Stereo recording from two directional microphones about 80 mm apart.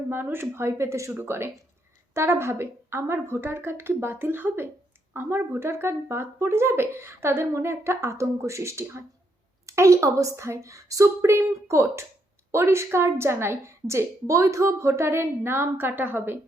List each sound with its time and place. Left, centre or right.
0.1 s a woman's voice: right